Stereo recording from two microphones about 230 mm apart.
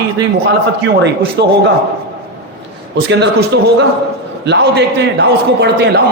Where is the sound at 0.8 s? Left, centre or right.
Right.